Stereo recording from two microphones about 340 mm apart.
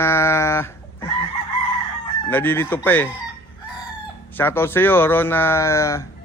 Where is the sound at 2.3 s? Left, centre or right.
Centre.